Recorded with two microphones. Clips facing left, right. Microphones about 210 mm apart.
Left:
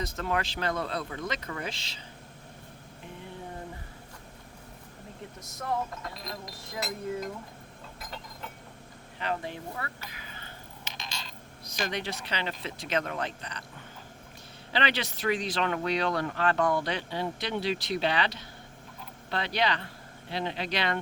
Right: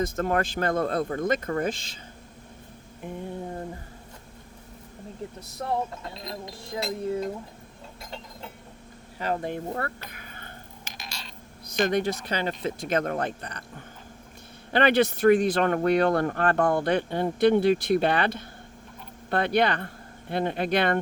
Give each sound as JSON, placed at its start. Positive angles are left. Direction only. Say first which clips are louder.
{"t": 0.0, "sound": "speech", "louder": "right 6 dB", "side_deg": -50}
{"t": 3.0, "sound": "speech", "louder": "right 9 dB", "side_deg": -50}
{"t": 5.5, "sound": "speech", "louder": "right 3 dB", "side_deg": -30}
{"t": 9.1, "sound": "speech", "louder": "right 5 dB", "side_deg": -40}
{"t": 10.1, "sound": "a sound", "louder": "right 2 dB", "side_deg": -50}
{"t": 11.8, "sound": "speech", "louder": "right 9 dB", "side_deg": -50}
{"t": 14.7, "sound": "speech", "louder": "right 10 dB", "side_deg": -55}